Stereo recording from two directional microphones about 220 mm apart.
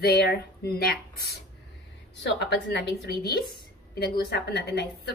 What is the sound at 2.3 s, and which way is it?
A woman's voice, 50° left (ahead or behind).